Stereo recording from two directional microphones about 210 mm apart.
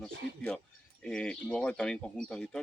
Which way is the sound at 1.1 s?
5° left (ahead or behind).